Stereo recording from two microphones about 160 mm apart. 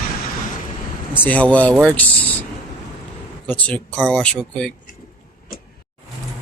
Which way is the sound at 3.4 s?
10° left (ahead or behind).